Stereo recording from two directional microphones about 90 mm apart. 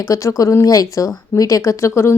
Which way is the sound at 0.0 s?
35° left (ahead or behind).